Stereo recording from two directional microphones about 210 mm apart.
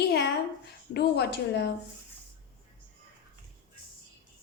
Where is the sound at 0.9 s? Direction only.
50° left (ahead or behind).